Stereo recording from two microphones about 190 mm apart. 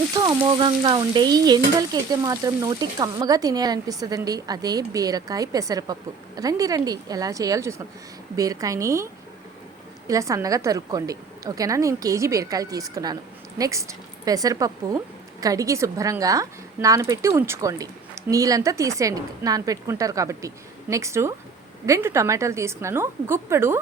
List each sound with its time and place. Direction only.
0.2 s speech: 25° right (ahead or behind)
10.1 s speech: 15° right (ahead or behind)